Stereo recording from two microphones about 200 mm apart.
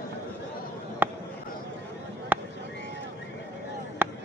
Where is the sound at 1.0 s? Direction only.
10° right (ahead or behind).